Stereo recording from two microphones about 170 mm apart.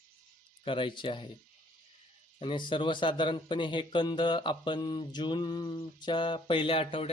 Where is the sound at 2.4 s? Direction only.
30° left (ahead or behind).